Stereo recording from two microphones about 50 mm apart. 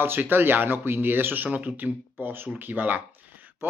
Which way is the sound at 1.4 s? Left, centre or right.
Right.